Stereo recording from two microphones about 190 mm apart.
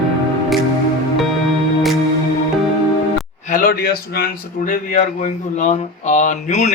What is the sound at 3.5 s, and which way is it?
A man's voice, 45° left (ahead or behind).